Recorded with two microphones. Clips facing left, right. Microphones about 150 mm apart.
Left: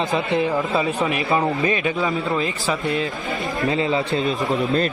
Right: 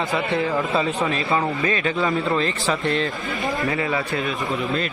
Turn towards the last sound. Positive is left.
turn(degrees=25)  # may be behind; listen again after turning